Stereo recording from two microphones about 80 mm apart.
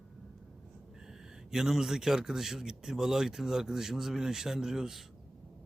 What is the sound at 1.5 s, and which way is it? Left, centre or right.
A man's voice, centre.